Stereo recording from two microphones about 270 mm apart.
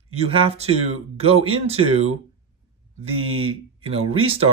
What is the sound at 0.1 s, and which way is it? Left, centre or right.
Speech, right.